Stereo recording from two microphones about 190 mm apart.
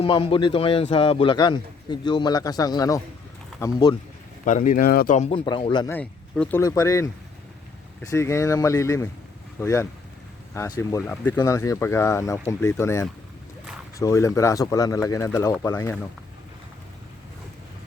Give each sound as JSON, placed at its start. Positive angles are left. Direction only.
{"t": 0.0, "sound": "a man's voice", "side_deg": 30}
{"t": 4.4, "sound": "speech", "side_deg": 45}
{"t": 5.1, "sound": "a man's voice", "side_deg": 35}
{"t": 5.9, "sound": "speech", "side_deg": 5}